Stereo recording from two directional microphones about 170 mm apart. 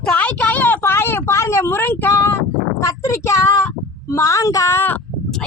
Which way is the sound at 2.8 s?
15° left (ahead or behind).